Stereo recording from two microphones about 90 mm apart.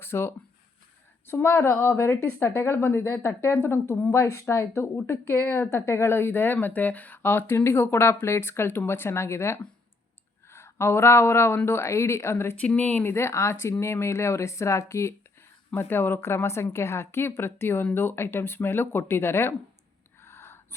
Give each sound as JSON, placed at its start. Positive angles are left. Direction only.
{"t": 0.0, "sound": "speech", "side_deg": 25}
{"t": 12.5, "sound": "speech", "side_deg": 15}
{"t": 13.1, "sound": "speech", "side_deg": 35}
{"t": 20.2, "sound": "gasp", "side_deg": 25}